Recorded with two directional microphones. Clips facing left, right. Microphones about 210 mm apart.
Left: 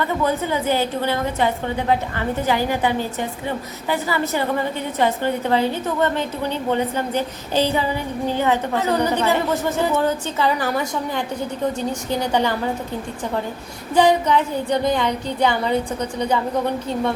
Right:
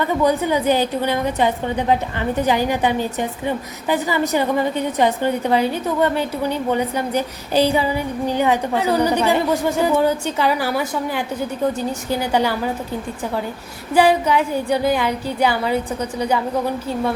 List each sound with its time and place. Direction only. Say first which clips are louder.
0.3 s a woman's voice: right 4 dB; 15° right (ahead or behind)
13.9 s a woman's voice: right 1 dB; 10° right (ahead or behind)